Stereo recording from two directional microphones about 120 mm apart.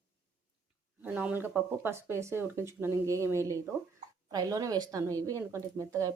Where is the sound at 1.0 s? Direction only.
10° right (ahead or behind).